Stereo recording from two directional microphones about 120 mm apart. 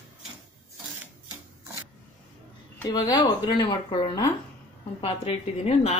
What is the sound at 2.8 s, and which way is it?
Speech, 35° left (ahead or behind).